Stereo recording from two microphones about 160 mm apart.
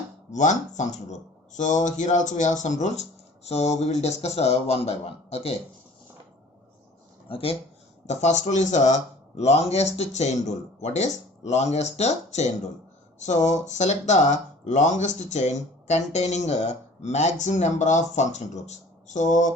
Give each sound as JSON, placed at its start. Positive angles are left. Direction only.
{"t": 0.3, "sound": "speech", "side_deg": 50}
{"t": 7.3, "sound": "speech", "side_deg": 35}
{"t": 8.0, "sound": "speech", "side_deg": 45}